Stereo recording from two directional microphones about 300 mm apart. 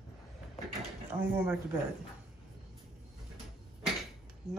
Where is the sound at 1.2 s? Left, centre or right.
Centre.